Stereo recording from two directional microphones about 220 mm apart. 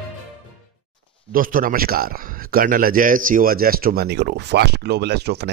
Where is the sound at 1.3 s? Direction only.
40° right (ahead or behind).